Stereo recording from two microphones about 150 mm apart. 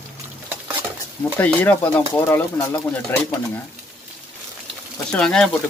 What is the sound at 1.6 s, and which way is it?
Speech, 10° left (ahead or behind).